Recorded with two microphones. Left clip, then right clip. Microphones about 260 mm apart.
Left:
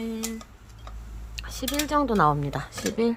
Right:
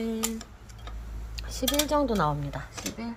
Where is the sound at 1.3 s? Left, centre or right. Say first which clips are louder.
Left 1 dB; centre.